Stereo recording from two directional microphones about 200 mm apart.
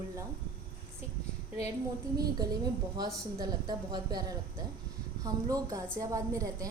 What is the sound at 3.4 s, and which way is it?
Speech, 20° right (ahead or behind).